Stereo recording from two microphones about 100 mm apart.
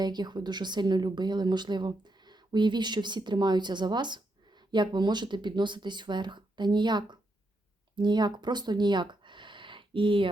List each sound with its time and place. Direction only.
0.0 s speech: 45° right (ahead or behind)